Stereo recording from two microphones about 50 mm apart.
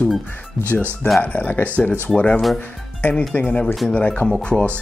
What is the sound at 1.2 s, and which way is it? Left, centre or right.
Speech, left.